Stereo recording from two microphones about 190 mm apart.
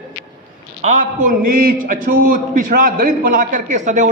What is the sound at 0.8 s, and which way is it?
A man's voice, 40° right (ahead or behind).